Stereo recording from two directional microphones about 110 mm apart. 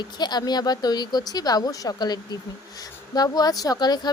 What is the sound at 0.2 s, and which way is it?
A woman's voice, 40° left (ahead or behind).